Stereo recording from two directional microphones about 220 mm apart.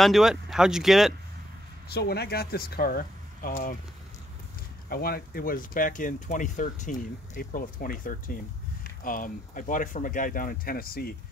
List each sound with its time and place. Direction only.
0.0 s speech: centre (ahead or behind)
1.9 s speech: 45° left (ahead or behind)
4.8 s speech: 45° left (ahead or behind)